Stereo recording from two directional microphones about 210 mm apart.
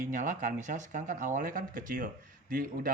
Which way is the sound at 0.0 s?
40° right (ahead or behind).